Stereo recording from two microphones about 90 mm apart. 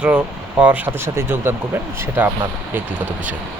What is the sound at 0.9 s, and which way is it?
Speech, 30° right (ahead or behind).